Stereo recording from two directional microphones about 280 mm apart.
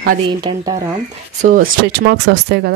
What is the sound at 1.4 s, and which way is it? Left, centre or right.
Speech, right.